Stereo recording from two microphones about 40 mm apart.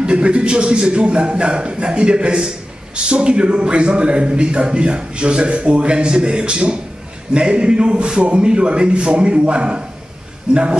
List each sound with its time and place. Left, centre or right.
0.0 s a man's voice: right